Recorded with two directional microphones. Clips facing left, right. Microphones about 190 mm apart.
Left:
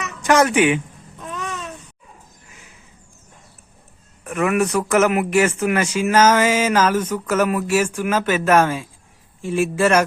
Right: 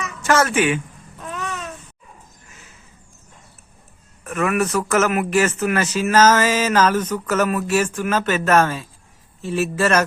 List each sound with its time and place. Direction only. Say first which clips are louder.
0.2 s speech: left 3 dB; 15° left (ahead or behind)
2.5 s cat: left 2 dB; 10° left (ahead or behind)
4.2 s speech: left 1 dB; 15° left (ahead or behind)